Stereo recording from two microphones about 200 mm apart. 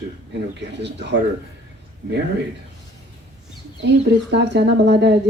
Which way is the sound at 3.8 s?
60° right (ahead or behind).